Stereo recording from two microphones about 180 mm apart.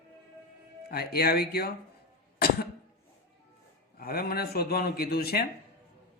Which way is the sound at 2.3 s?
60° left (ahead or behind).